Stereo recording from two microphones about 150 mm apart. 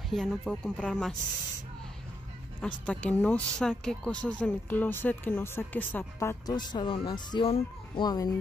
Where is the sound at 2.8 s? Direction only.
10° left (ahead or behind).